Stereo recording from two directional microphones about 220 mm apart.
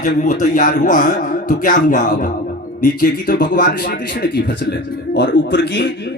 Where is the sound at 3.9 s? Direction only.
55° left (ahead or behind).